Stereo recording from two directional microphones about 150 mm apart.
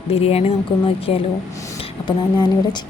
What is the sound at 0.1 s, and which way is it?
A woman's voice, 40° left (ahead or behind).